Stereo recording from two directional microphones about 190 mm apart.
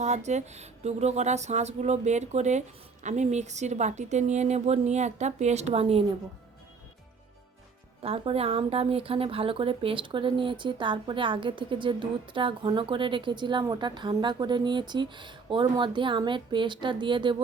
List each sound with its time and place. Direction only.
0.0 s speech: 35° right (ahead or behind)
8.0 s speech: 30° right (ahead or behind)